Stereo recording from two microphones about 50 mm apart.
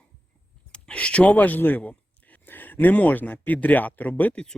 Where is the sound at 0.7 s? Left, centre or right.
Left.